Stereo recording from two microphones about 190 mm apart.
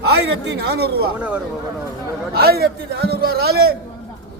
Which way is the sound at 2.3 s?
55° right (ahead or behind).